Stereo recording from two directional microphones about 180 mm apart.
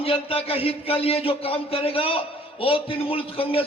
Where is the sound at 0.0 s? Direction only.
30° left (ahead or behind).